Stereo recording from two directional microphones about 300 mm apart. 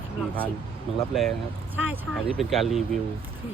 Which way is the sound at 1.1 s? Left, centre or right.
Centre.